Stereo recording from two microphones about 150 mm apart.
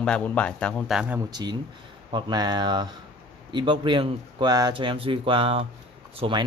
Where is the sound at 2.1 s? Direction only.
30° right (ahead or behind).